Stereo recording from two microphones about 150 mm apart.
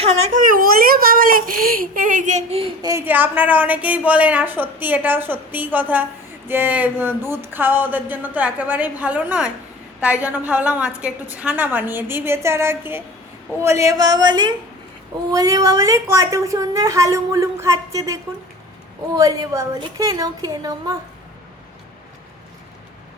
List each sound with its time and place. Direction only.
0.3 s a child's voice: 70° right (ahead or behind); by 2.6 s 50° right (ahead or behind)
2.8 s a woman's voice: 15° right (ahead or behind)